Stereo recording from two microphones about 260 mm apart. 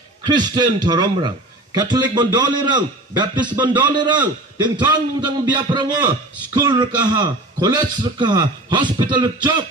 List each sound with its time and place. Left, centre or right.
0.3 s a man's voice: centre